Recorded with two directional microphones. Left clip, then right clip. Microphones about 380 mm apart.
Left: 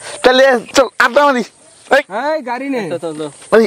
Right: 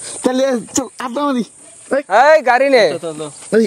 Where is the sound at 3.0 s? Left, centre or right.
Centre.